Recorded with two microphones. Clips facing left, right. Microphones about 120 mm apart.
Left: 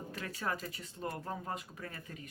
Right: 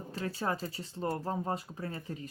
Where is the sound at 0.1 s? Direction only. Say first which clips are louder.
Right 5 dB; 30° right (ahead or behind).